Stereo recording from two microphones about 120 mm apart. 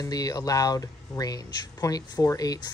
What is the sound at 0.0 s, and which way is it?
Speech, 30° left (ahead or behind).